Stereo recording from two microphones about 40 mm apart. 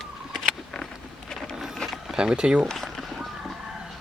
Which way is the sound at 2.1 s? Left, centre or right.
Centre.